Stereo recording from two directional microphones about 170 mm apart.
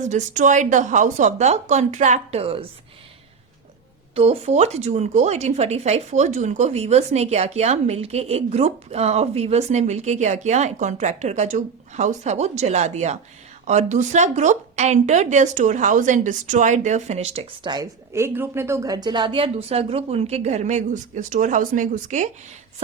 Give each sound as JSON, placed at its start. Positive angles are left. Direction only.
{"t": 0.0, "sound": "speech", "side_deg": -45}
{"t": 4.1, "sound": "a woman's voice", "side_deg": -35}